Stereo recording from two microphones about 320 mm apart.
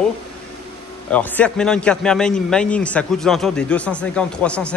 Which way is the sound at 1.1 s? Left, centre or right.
Centre.